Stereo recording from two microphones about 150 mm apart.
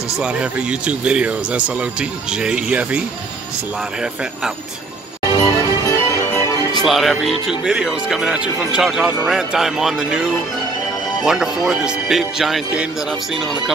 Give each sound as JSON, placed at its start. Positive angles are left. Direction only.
{"t": 0.2, "sound": "speech", "side_deg": -5}
{"t": 5.4, "sound": "music", "side_deg": 20}
{"t": 6.8, "sound": "speech", "side_deg": 0}
{"t": 11.2, "sound": "speech", "side_deg": -5}